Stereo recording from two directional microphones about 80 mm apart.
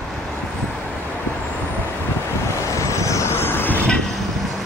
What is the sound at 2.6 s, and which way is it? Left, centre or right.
Vehicle, left.